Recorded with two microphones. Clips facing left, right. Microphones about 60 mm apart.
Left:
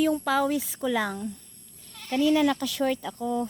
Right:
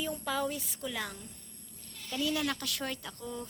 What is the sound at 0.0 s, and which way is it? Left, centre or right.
Speech, left.